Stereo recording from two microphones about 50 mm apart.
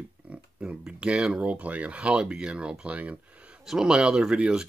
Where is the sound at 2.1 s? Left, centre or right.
Centre.